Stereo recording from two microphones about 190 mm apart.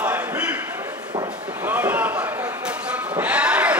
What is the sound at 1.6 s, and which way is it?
Sheep, 10° right (ahead or behind).